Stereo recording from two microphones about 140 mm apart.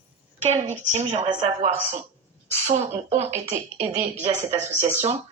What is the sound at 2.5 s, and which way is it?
A woman's voice, 55° right (ahead or behind).